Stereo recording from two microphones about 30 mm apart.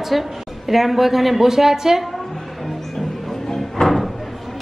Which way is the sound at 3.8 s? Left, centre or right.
Left.